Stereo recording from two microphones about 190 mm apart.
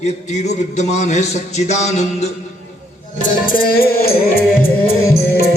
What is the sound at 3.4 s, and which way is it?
Music, 50° left (ahead or behind).